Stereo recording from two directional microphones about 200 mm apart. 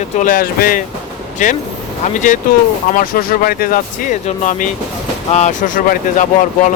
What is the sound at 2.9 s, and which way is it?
Speech, 45° left (ahead or behind).